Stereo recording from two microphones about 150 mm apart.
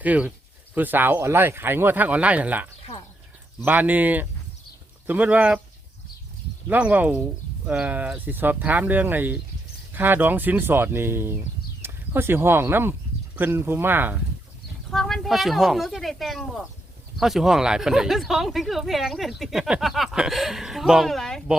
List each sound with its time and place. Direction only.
0.0 s speech: 10° right (ahead or behind)
6.7 s speech: 10° right (ahead or behind)
14.8 s speech: centre (ahead or behind)